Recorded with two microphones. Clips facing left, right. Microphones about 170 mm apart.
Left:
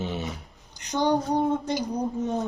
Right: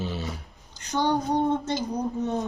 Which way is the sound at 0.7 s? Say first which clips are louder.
Left 1 dB; 15° left (ahead or behind).